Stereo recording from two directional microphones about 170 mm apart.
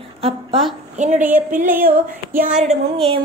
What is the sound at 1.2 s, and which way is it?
Speech, 10° right (ahead or behind).